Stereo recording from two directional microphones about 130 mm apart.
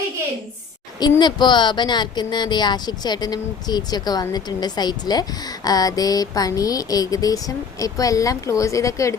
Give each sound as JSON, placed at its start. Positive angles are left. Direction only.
{"t": 1.2, "sound": "speech", "side_deg": 35}